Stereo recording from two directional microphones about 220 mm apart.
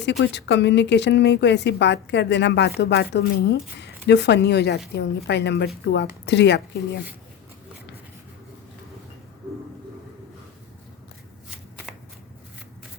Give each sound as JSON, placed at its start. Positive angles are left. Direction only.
{"t": 0.0, "sound": "a woman's voice", "side_deg": 50}